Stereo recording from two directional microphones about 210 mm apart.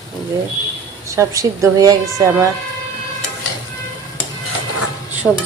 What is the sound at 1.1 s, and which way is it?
Speech, 15° right (ahead or behind).